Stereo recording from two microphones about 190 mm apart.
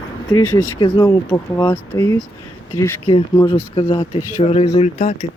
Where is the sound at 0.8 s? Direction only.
25° left (ahead or behind).